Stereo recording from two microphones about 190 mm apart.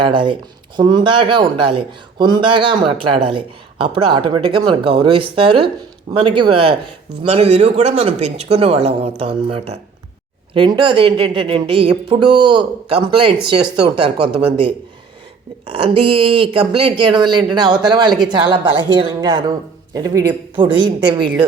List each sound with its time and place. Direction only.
0.0 s speech: 25° right (ahead or behind)
15.7 s speech: 30° right (ahead or behind)